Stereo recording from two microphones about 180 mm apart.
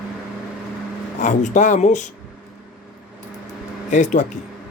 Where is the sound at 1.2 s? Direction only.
45° left (ahead or behind).